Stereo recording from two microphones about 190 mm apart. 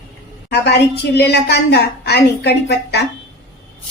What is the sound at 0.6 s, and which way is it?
A woman's voice, 60° left (ahead or behind).